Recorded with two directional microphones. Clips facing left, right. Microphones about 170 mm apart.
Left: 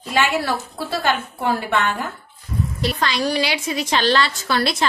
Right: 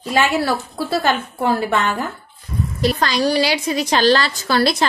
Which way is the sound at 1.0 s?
40° right (ahead or behind).